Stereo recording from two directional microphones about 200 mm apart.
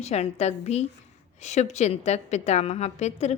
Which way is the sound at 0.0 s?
30° left (ahead or behind).